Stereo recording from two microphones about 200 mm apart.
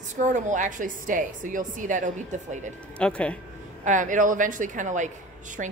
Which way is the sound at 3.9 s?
40° right (ahead or behind).